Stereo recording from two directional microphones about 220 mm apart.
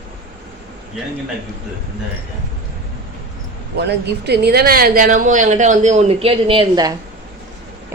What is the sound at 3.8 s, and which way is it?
Speech, 50° right (ahead or behind).